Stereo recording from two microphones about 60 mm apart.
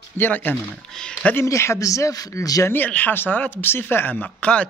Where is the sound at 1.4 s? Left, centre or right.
Left.